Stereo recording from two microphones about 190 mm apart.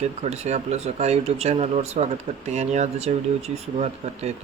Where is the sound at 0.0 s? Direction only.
35° right (ahead or behind).